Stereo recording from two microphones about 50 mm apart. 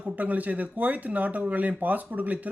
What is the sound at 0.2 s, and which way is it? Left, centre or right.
Speech, right.